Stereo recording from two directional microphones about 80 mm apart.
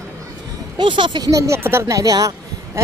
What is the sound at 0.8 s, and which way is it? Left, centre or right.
Speech, right.